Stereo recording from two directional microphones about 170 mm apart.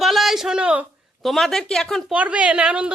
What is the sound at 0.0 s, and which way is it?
A woman's voice, centre (ahead or behind).